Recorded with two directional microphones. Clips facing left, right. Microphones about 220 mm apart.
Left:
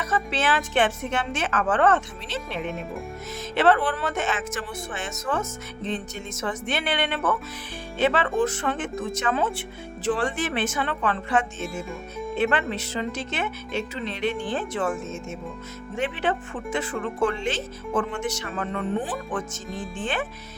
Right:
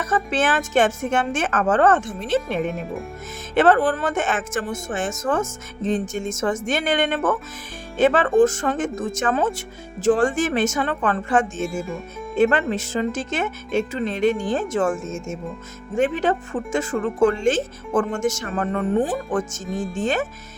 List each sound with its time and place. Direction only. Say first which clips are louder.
0.0 s speech: right 4 dB; 50° right (ahead or behind)
2.6 s speech: right 4 dB; centre (ahead or behind)
3.5 s speech: right 4 dB; 50° right (ahead or behind)